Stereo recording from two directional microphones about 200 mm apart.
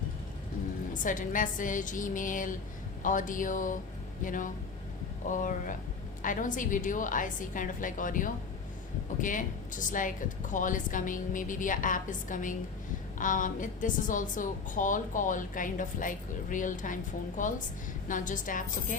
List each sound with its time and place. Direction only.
1.0 s a woman's voice: 40° left (ahead or behind)